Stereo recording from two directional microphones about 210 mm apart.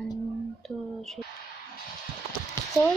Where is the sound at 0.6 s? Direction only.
Centre (ahead or behind).